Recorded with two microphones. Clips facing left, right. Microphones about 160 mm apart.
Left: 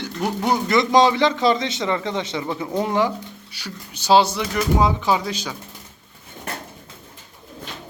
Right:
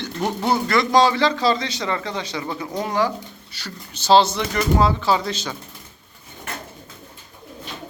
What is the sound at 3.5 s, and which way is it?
Speech, 10° left (ahead or behind).